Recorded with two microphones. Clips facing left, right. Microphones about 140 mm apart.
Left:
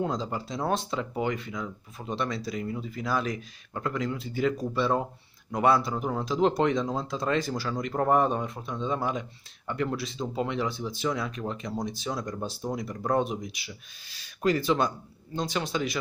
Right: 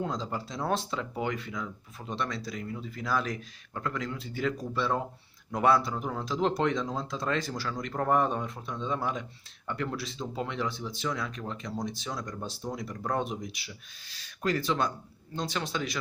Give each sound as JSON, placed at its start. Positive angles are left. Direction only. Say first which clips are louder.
{"t": 0.0, "sound": "speech", "louder": "left 3 dB", "side_deg": 5}
{"t": 7.7, "sound": "speech", "louder": "left 3 dB", "side_deg": 20}
{"t": 12.2, "sound": "speech", "louder": "left 4 dB", "side_deg": 25}
{"t": 12.4, "sound": "speech", "louder": "left 4 dB", "side_deg": 10}